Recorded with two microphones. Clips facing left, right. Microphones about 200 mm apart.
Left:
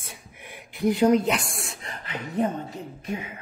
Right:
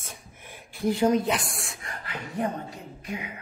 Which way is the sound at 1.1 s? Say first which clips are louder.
Left 3 dB; 20° left (ahead or behind).